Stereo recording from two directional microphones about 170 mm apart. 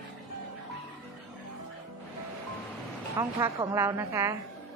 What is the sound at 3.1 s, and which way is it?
A woman's voice, 20° right (ahead or behind).